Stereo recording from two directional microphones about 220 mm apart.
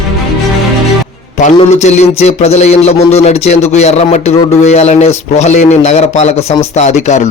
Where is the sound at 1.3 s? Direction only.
30° left (ahead or behind).